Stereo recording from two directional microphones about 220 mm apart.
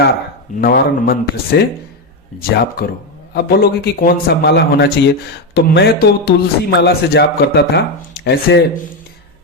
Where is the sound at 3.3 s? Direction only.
45° left (ahead or behind).